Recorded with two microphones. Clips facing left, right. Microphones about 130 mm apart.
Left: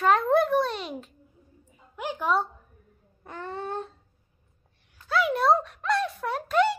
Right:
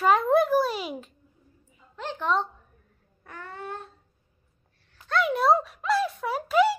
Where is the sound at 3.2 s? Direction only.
25° left (ahead or behind).